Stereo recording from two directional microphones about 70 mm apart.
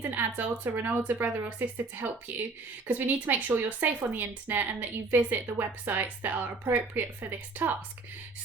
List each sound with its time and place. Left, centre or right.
0.0 s speech: right